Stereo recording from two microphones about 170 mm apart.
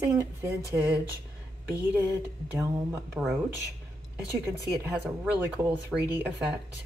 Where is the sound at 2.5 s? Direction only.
15° right (ahead or behind).